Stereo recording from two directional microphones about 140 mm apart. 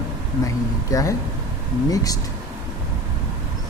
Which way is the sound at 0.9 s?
25° left (ahead or behind).